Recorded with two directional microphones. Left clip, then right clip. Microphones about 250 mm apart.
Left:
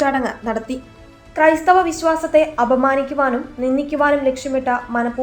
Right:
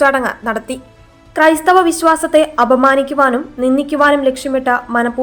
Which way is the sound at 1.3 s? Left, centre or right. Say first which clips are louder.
Right 3 dB; right.